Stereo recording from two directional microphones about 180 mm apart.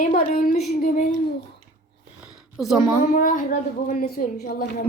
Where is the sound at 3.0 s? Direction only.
45° left (ahead or behind).